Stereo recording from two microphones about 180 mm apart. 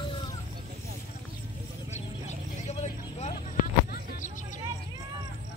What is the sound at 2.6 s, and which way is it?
Vehicle, 40° left (ahead or behind).